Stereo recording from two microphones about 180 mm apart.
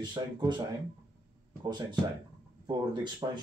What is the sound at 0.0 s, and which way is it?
Speech, 25° right (ahead or behind).